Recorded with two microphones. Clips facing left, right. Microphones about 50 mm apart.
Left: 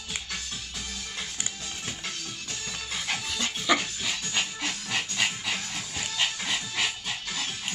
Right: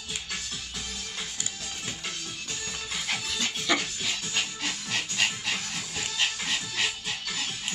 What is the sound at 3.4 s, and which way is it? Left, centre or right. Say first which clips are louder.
Dog: left 3 dB; centre.